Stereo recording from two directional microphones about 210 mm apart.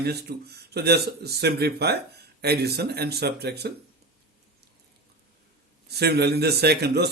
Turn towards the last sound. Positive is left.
turn(degrees=-50)  # may be behind; listen again after turning